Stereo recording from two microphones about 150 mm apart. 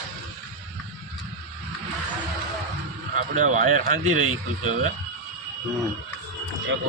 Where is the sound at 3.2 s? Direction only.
55° right (ahead or behind).